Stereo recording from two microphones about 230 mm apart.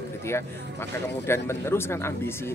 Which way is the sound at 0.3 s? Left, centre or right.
Centre.